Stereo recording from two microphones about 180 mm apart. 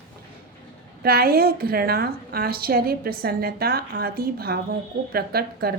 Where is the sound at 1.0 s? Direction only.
55° right (ahead or behind).